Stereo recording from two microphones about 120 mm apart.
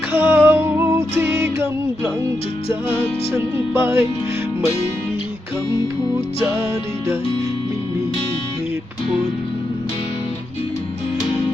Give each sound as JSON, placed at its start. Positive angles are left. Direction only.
{"t": 0.1, "sound": "music", "side_deg": -15}
{"t": 3.3, "sound": "music", "side_deg": -20}